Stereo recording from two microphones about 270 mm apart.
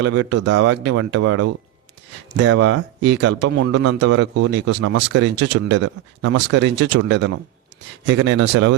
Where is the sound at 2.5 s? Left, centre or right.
Right.